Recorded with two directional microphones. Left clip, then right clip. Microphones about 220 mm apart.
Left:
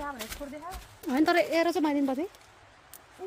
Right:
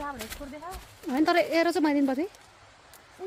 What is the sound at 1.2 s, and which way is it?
A woman's voice, centre (ahead or behind).